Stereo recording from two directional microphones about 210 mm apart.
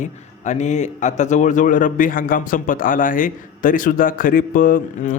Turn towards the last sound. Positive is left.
turn(degrees=40)  # may be behind; listen again after turning